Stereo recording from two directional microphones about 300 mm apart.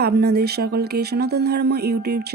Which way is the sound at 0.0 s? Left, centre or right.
Right.